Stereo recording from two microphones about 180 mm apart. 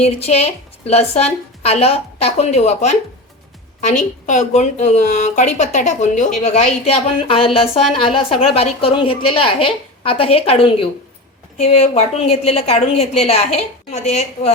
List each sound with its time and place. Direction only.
0.0 s a woman's voice: 35° left (ahead or behind)